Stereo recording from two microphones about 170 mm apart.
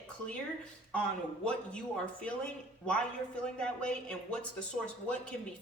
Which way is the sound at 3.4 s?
5° left (ahead or behind).